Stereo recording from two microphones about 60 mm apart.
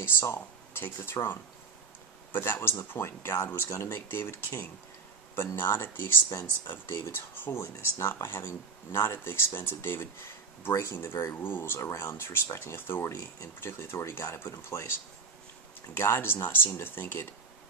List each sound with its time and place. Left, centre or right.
0.0 s speech: left
10.7 s speech: left